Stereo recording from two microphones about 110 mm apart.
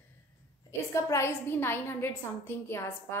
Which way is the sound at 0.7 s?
25° left (ahead or behind).